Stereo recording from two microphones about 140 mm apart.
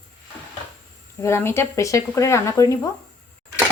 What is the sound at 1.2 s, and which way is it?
Speech, 20° left (ahead or behind).